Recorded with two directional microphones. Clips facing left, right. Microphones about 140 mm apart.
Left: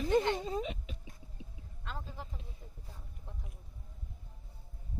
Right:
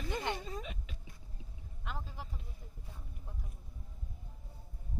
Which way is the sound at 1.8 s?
15° right (ahead or behind).